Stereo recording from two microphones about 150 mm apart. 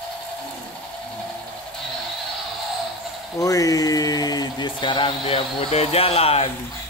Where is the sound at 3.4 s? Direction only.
20° left (ahead or behind); by 6.4 s 40° left (ahead or behind).